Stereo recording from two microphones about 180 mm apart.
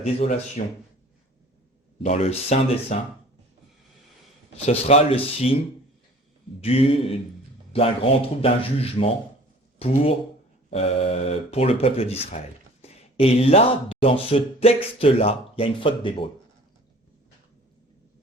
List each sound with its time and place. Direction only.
0.0 s speech: 35° left (ahead or behind)
2.0 s speech: 35° left (ahead or behind)
4.5 s speech: 35° left (ahead or behind)
6.6 s speech: 35° left (ahead or behind)